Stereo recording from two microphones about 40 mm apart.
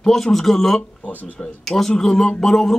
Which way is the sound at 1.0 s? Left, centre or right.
Left.